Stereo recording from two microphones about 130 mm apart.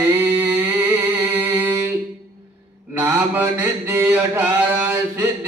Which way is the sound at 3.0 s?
15° right (ahead or behind).